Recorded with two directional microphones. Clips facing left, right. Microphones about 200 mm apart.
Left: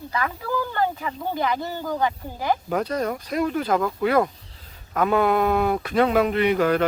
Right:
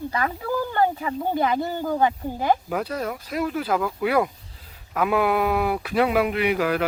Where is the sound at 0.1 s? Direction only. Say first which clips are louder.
Left 2 dB; 30° right (ahead or behind).